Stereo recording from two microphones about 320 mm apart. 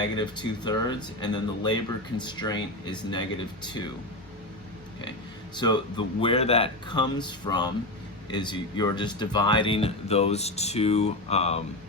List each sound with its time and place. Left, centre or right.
0.0 s speech: centre
5.5 s speech: centre